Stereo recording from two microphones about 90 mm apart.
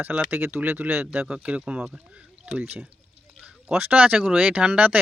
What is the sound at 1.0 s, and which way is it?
Speech, 10° right (ahead or behind).